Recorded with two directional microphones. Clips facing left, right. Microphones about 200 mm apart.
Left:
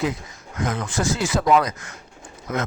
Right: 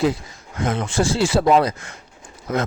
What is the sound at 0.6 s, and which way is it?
Speech, 30° right (ahead or behind).